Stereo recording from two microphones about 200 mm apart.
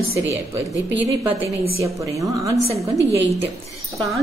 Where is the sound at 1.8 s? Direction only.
15° right (ahead or behind).